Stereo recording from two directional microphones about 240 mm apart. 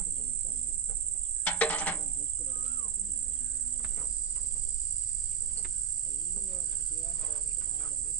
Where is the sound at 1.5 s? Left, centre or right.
Centre.